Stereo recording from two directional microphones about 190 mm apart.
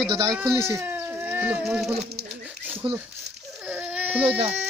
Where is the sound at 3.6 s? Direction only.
5° right (ahead or behind).